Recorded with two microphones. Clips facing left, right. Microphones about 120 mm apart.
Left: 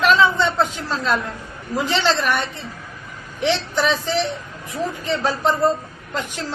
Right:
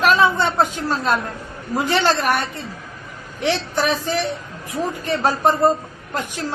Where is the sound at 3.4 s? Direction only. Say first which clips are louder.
Even; 50° right (ahead or behind).